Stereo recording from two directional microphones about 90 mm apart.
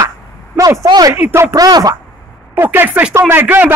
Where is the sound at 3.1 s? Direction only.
30° right (ahead or behind).